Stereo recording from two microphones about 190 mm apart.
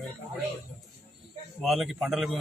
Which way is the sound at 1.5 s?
Centre (ahead or behind).